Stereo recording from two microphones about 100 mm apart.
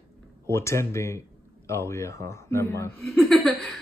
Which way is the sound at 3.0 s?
Centre (ahead or behind).